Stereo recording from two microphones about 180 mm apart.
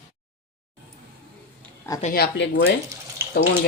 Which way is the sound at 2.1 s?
70° left (ahead or behind).